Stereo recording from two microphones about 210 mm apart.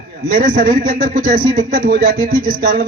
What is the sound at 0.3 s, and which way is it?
Speech, 40° right (ahead or behind).